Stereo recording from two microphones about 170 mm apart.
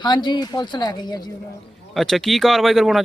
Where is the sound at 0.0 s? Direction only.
25° left (ahead or behind).